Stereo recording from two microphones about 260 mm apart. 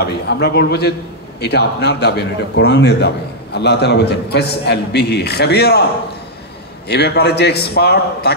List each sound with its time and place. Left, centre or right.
0.0 s a man's voice: left
6.9 s a man's voice: left